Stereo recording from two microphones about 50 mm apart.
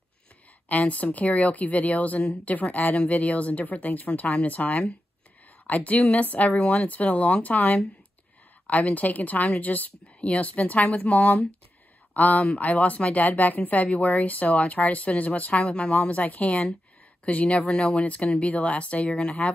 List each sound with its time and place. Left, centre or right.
0.7 s a woman's voice: left
15.6 s speech: centre